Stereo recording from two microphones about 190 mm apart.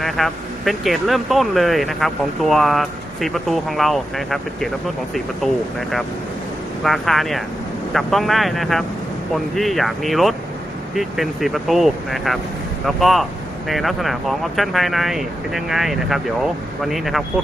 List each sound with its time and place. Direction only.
0.0 s speech: centre (ahead or behind)
6.8 s speech: centre (ahead or behind)